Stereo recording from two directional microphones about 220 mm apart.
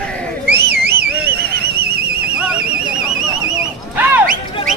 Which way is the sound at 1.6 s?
45° right (ahead or behind).